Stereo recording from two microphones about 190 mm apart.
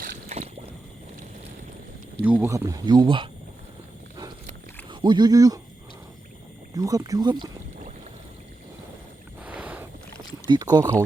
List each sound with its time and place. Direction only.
0.3 s boat: 35° right (ahead or behind)
2.2 s speech: 10° right (ahead or behind)
4.9 s speech: 25° right (ahead or behind)
6.7 s speech: 20° right (ahead or behind)
9.4 s a sound: 10° right (ahead or behind)
10.4 s speech: 20° right (ahead or behind)